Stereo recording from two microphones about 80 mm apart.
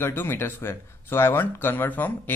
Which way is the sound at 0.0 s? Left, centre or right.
Left.